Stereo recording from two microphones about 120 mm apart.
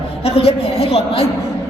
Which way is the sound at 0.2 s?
55° left (ahead or behind).